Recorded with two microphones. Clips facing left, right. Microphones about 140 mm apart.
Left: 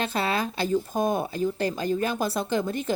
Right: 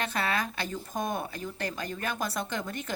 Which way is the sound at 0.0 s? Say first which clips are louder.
Left 4 dB; 30° left (ahead or behind).